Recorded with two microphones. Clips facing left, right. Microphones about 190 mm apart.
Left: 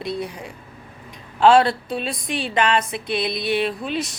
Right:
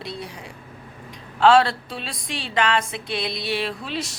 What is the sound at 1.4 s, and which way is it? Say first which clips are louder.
A woman's voice: left 2 dB; 20° left (ahead or behind).